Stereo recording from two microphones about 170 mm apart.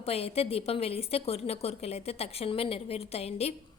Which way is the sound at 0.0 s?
35° left (ahead or behind).